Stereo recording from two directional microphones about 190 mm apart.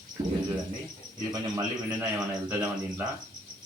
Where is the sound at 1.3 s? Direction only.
20° right (ahead or behind).